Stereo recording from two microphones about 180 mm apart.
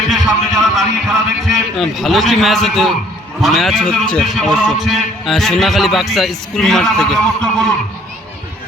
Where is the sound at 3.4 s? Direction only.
Centre (ahead or behind).